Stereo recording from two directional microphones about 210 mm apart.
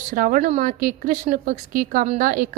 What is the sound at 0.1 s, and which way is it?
A woman's voice, 40° right (ahead or behind).